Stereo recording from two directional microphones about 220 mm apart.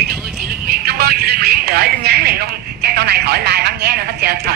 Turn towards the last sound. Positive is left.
turn(degrees=-45)  # may be behind; listen again after turning